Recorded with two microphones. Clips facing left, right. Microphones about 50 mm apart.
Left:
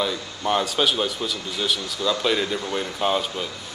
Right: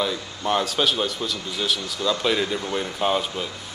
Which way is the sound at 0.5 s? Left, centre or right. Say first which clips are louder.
Even; centre.